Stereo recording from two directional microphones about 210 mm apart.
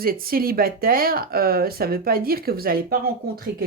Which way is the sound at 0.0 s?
45° right (ahead or behind).